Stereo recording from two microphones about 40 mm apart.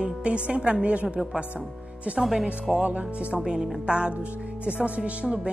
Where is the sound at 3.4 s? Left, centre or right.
Centre.